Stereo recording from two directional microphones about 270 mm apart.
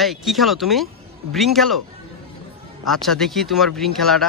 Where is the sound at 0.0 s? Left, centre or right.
Centre.